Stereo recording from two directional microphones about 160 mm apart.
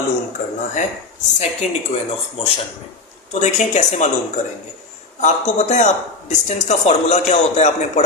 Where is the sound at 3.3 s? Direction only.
45° left (ahead or behind).